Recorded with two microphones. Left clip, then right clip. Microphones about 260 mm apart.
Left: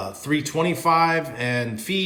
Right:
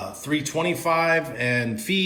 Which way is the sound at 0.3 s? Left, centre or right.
Centre.